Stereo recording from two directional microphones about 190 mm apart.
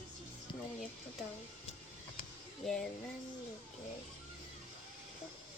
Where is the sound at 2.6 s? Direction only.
5° left (ahead or behind).